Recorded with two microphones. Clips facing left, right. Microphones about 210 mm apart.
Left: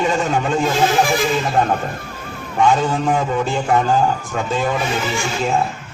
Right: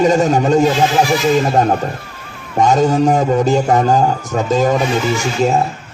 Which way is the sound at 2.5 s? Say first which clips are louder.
Right 4 dB; 40° right (ahead or behind).